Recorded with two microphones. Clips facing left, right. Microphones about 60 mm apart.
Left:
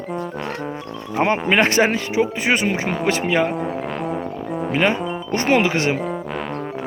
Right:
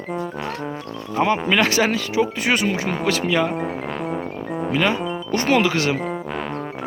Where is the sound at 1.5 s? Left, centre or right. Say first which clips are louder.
Left 2 dB; left.